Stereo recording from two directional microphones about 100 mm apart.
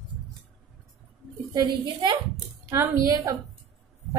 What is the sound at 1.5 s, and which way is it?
Speech, 50° right (ahead or behind).